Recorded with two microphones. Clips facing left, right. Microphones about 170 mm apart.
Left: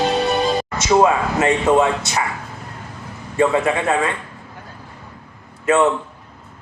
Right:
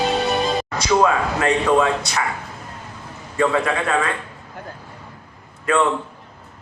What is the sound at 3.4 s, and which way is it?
Speech, 25° left (ahead or behind).